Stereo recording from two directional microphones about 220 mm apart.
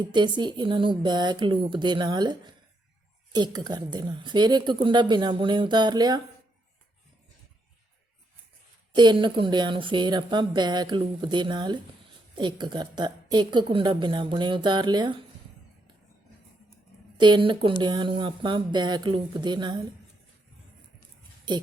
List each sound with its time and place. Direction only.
0.0 s speech: 20° right (ahead or behind)
8.9 s speech: 20° right (ahead or behind)
17.2 s speech: 20° right (ahead or behind)